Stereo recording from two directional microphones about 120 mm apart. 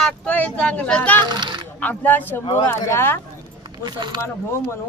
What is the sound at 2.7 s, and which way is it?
Speech, 20° left (ahead or behind).